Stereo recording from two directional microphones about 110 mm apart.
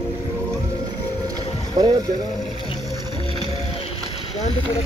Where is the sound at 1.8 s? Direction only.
40° right (ahead or behind).